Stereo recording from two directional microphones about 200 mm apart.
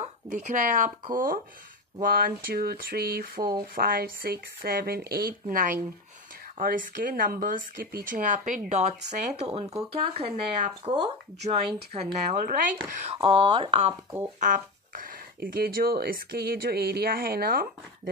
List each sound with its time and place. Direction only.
0.0 s speech: 35° right (ahead or behind)
13.1 s speech: 25° right (ahead or behind)
14.4 s speech: 40° right (ahead or behind)